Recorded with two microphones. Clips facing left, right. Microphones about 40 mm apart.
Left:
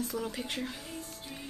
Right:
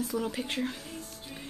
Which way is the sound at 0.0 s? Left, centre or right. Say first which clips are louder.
Right 3 dB; centre.